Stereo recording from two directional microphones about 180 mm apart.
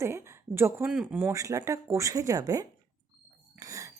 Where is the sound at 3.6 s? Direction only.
20° right (ahead or behind).